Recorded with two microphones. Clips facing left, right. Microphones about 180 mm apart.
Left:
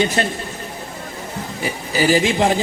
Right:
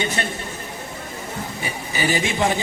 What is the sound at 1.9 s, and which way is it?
Speech, 35° left (ahead or behind).